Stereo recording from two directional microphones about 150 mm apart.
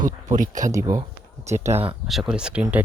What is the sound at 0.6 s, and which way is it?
Speech, 25° right (ahead or behind).